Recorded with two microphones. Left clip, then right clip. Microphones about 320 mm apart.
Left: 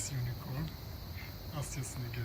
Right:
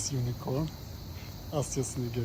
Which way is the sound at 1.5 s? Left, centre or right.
Centre.